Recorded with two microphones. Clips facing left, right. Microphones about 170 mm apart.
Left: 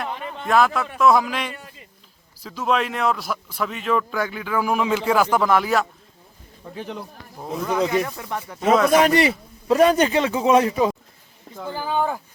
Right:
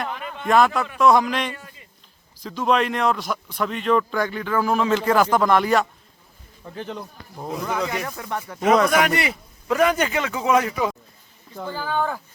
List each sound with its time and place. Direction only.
0.1 s a sound: 30° left (ahead or behind)
0.4 s a man's voice: centre (ahead or behind)
7.7 s a man's voice: 20° left (ahead or behind)
8.9 s a man's voice: 30° left (ahead or behind)
11.6 s speech: 15° left (ahead or behind)